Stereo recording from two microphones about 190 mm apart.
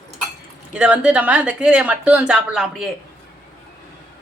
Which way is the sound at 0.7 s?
5° right (ahead or behind).